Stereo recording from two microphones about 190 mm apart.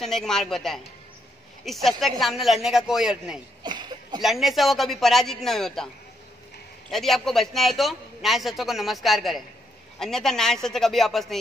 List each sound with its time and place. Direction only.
0.0 s a man's voice: centre (ahead or behind)
3.6 s a sound: 25° right (ahead or behind)
4.2 s a man's voice: centre (ahead or behind)
6.9 s a man's voice: centre (ahead or behind)